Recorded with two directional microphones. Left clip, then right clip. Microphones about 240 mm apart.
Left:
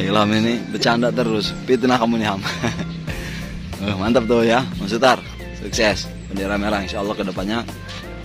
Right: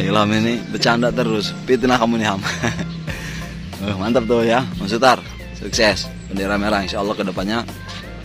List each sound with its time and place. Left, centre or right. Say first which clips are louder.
0.0 s speech: even; centre